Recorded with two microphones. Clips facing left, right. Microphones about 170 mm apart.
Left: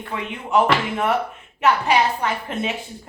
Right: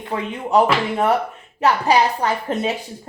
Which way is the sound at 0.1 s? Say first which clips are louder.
Right 3 dB; 35° right (ahead or behind).